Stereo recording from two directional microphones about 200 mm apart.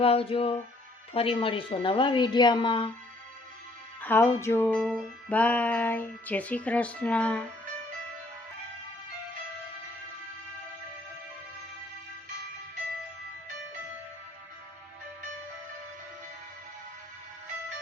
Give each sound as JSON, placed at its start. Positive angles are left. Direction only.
{"t": 0.0, "sound": "a woman's voice", "side_deg": 30}
{"t": 4.0, "sound": "music", "side_deg": 10}